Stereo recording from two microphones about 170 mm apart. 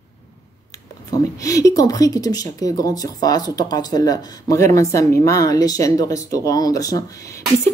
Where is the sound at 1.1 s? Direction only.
20° left (ahead or behind).